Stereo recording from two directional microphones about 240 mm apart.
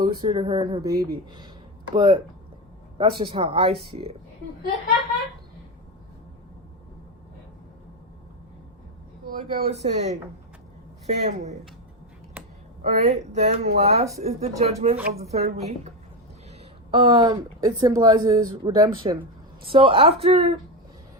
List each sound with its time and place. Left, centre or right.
0.0 s speech: centre
9.2 s speech: right
12.8 s speech: right
16.9 s a woman's voice: right